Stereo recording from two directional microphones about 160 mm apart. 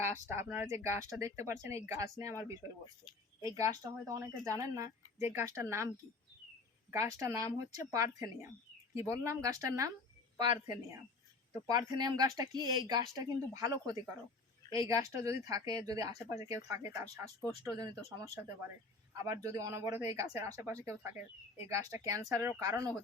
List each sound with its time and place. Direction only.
0.0 s speech: 15° right (ahead or behind)
3.6 s a woman's voice: 20° right (ahead or behind)
7.2 s a woman's voice: 20° right (ahead or behind)
19.1 s a woman's voice: 20° right (ahead or behind)